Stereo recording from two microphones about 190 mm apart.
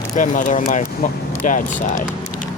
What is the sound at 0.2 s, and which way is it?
Speech, 45° left (ahead or behind).